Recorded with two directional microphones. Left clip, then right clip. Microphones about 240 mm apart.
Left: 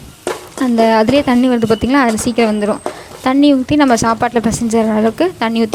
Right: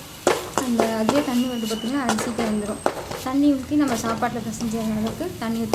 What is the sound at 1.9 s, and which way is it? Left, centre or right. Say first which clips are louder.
Speech: left 11 dB; left.